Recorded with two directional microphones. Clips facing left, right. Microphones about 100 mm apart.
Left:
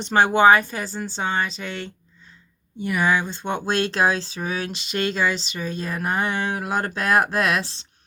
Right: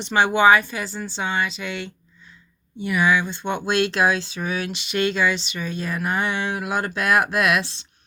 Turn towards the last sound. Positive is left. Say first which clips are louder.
# right 1 dB
turn(degrees=35)  # may be behind; listen again after turning